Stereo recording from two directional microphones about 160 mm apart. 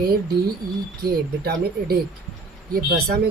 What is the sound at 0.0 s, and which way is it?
Speech, 75° right (ahead or behind).